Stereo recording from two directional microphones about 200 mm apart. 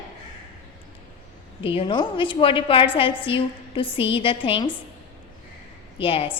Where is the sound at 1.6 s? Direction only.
25° left (ahead or behind).